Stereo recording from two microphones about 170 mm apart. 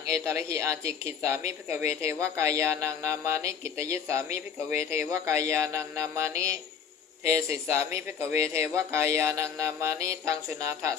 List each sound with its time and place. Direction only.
0.1 s speech: 20° right (ahead or behind)